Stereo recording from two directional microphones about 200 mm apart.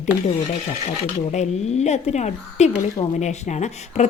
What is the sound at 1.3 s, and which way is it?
Speech, 35° left (ahead or behind).